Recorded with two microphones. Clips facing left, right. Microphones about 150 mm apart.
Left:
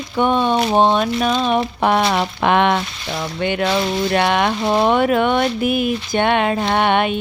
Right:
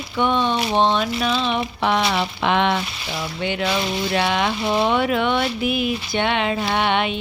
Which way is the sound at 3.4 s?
55° left (ahead or behind).